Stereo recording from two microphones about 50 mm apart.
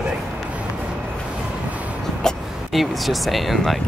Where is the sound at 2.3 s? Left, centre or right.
Centre.